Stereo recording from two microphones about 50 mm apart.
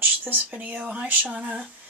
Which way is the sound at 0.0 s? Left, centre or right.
Right.